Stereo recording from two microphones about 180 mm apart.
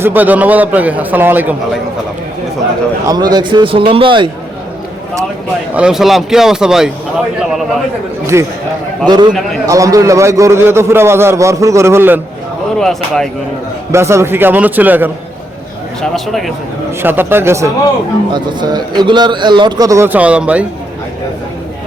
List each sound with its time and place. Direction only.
0.0 s a man's voice: 10° right (ahead or behind)
3.1 s speech: 20° right (ahead or behind)
5.7 s speech: 5° right (ahead or behind)
8.3 s a man's voice: 15° right (ahead or behind)
12.8 s speech: centre (ahead or behind)
13.9 s a man's voice: 15° right (ahead or behind)
16.0 s speech: centre (ahead or behind)
17.0 s a man's voice: 10° right (ahead or behind)